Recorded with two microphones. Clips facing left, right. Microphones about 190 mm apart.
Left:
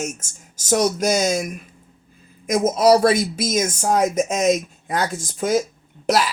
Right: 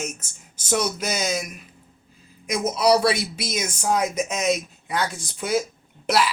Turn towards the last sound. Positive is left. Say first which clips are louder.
# left 2 dB
turn(degrees=45)  # may be behind; listen again after turning